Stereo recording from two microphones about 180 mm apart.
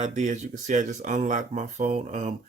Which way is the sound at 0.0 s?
45° right (ahead or behind).